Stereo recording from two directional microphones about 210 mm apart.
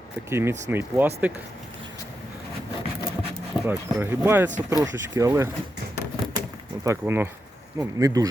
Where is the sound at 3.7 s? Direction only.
10° right (ahead or behind).